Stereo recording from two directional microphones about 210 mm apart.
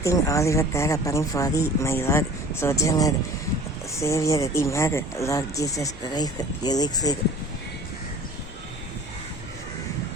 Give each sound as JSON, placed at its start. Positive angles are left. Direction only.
{"t": 0.0, "sound": "speech", "side_deg": 15}